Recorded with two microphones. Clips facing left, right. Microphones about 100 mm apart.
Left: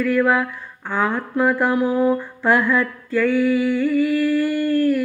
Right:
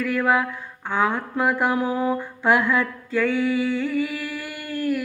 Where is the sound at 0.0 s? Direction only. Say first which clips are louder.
Left 3 dB; 15° right (ahead or behind).